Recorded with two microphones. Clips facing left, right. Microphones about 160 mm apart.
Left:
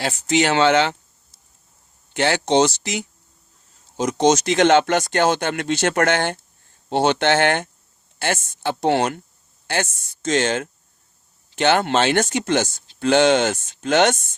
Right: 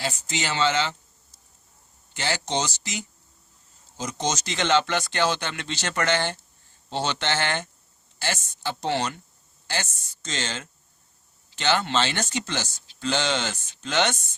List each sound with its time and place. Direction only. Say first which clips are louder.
0.0 s speech: left 10 dB; 65° left (ahead or behind)
2.1 s speech: left 10 dB; 60° left (ahead or behind)